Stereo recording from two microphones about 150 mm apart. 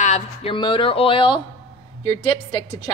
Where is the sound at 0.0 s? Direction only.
50° left (ahead or behind).